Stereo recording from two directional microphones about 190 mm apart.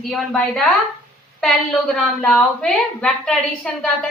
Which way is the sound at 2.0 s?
5° left (ahead or behind).